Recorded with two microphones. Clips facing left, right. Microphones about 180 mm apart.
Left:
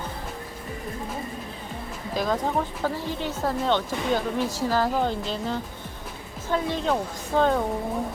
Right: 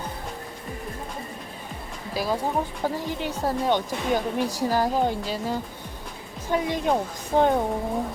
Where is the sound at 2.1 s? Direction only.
5° right (ahead or behind).